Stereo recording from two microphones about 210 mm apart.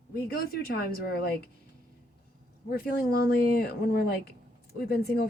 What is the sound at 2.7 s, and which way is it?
Speech, 45° left (ahead or behind).